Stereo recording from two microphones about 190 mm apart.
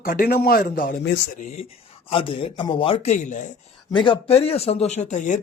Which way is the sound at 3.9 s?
25° left (ahead or behind).